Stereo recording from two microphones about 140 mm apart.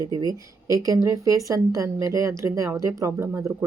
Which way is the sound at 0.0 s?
25° right (ahead or behind).